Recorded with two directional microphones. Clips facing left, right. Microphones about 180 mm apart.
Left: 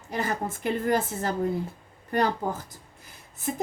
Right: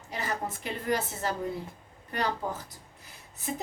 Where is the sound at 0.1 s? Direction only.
50° left (ahead or behind).